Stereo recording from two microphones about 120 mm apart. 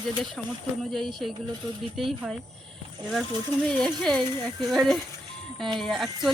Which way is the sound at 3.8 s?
5° left (ahead or behind).